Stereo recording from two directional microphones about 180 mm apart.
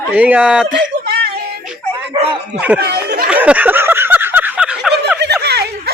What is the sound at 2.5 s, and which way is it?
Speech, 5° right (ahead or behind).